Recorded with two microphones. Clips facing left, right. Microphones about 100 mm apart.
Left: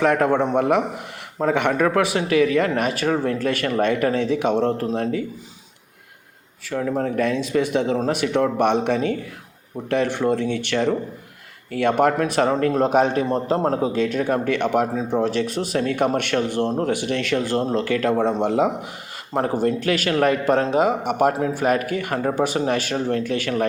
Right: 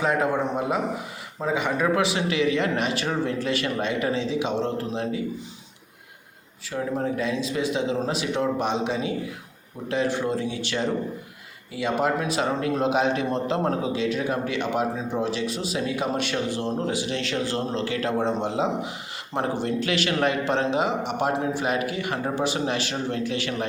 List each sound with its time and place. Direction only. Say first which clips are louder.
0.0 s speech: left 5 dB; 60° left (ahead or behind)
6.7 s speech: left 4 dB; 50° left (ahead or behind)
13.2 s a man's voice: left 4 dB; 35° left (ahead or behind)
13.9 s speech: left 4 dB; 50° left (ahead or behind)